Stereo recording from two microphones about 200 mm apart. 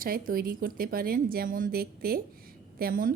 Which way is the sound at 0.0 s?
45° right (ahead or behind).